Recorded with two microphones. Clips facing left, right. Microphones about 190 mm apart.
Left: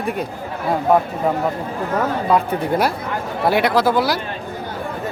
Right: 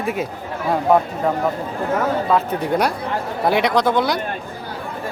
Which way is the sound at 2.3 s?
10° left (ahead or behind).